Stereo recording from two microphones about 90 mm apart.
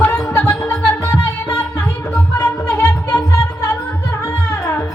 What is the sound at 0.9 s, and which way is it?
Music, 35° left (ahead or behind).